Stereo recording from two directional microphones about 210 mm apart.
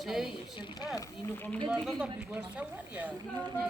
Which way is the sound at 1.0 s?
10° left (ahead or behind).